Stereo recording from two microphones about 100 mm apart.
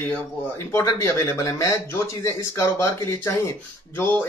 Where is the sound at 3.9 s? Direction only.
20° left (ahead or behind).